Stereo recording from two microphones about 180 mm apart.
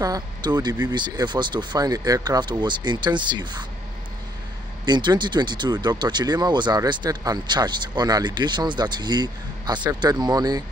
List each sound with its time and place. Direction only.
0.0 s speech: 20° right (ahead or behind)
4.8 s speech: 25° right (ahead or behind)